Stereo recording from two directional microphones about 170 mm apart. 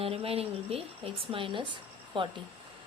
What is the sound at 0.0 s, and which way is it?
Speech, 35° right (ahead or behind).